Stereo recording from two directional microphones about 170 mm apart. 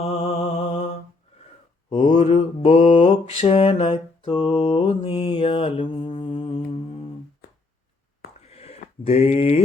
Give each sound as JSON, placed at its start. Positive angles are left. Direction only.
{"t": 0.0, "sound": "mantra", "side_deg": 35}
{"t": 2.0, "sound": "mantra", "side_deg": 35}
{"t": 8.4, "sound": "a sound", "side_deg": 40}